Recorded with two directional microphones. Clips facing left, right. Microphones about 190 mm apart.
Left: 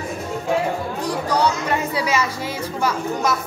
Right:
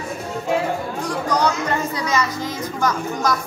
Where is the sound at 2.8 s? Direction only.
10° left (ahead or behind).